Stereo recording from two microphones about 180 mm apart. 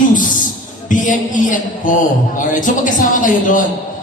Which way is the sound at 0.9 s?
45° left (ahead or behind).